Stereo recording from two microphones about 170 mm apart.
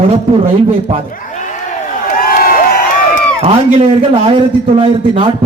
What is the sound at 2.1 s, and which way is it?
Crowd, 55° left (ahead or behind).